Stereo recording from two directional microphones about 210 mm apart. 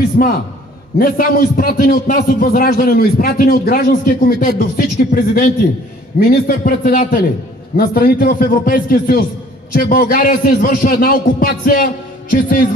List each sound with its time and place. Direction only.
0.2 s a man's voice: 45° left (ahead or behind)